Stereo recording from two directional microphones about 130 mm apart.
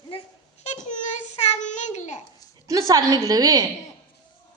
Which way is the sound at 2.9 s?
30° right (ahead or behind).